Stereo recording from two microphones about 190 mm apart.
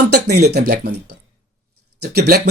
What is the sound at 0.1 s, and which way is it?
Speech, 60° right (ahead or behind).